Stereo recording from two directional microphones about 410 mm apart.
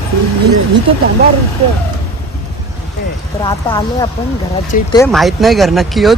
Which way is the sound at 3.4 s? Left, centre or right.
Centre.